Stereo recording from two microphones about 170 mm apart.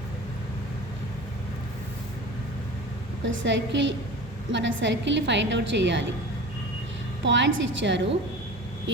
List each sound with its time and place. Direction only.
3.2 s a woman's voice: 90° right
7.3 s a woman's voice: 90° right